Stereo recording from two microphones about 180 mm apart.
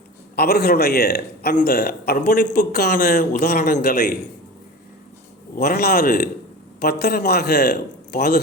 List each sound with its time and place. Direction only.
0.3 s speech: 60° left (ahead or behind)
5.5 s speech: 60° left (ahead or behind)